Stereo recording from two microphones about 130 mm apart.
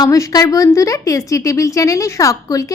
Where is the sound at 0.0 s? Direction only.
25° left (ahead or behind).